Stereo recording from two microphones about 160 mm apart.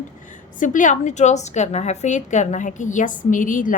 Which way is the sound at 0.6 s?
55° left (ahead or behind).